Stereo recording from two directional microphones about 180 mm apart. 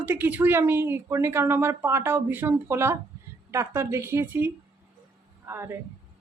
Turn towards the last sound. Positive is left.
turn(degrees=-15)  # may be behind; listen again after turning